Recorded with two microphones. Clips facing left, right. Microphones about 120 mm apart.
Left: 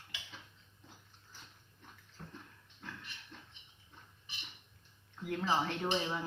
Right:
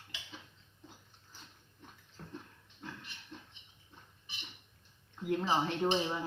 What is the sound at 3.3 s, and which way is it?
Rodents, 20° right (ahead or behind).